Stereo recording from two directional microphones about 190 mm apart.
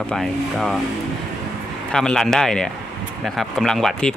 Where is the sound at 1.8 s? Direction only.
5° left (ahead or behind).